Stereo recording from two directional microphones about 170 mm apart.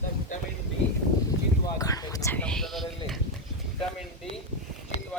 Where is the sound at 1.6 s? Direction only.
20° left (ahead or behind).